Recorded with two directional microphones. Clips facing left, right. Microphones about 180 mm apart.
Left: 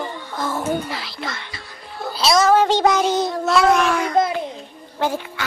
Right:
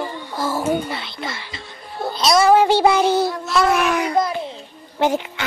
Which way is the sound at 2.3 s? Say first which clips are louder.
Right 2 dB; 10° right (ahead or behind).